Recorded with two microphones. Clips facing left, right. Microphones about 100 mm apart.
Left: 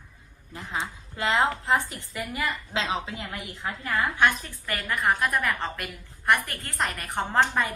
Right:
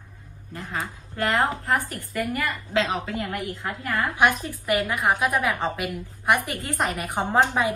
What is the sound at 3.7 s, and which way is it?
Speech, 15° right (ahead or behind).